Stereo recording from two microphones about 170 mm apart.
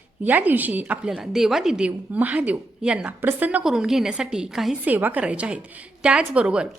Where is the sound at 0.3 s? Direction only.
10° right (ahead or behind).